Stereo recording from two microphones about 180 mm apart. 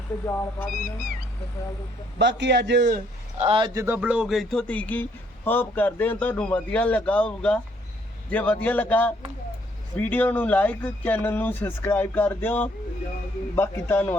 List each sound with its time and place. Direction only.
0.3 s speech: 15° left (ahead or behind)
2.1 s a man's voice: 75° right (ahead or behind)
3.3 s speech: 30° right (ahead or behind)
3.8 s speech: 10° right (ahead or behind); by 14.2 s 10° left (ahead or behind)